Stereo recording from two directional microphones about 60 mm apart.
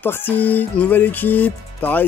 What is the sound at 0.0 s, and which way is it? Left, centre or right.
Music, left.